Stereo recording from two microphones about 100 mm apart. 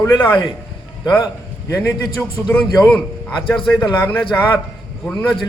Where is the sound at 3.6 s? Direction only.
45° left (ahead or behind).